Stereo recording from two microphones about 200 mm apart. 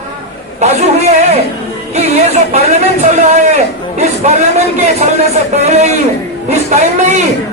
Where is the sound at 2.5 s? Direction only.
35° right (ahead or behind).